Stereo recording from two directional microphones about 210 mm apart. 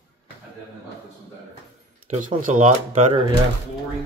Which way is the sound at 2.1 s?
40° right (ahead or behind).